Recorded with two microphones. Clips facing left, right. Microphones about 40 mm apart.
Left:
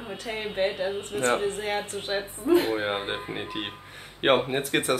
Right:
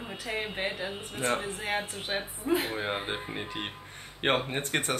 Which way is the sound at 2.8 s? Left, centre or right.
Centre.